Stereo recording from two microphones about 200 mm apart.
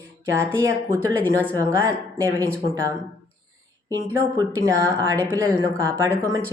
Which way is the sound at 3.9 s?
15° right (ahead or behind).